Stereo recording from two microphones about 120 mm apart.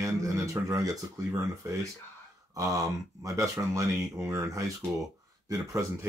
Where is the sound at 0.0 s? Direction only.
25° right (ahead or behind).